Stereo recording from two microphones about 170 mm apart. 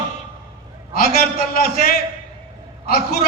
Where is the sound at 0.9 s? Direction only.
60° left (ahead or behind).